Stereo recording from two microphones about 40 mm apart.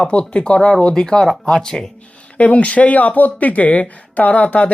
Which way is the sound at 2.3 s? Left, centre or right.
Left.